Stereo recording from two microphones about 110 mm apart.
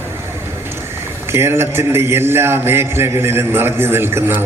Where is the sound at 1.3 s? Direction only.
25° right (ahead or behind).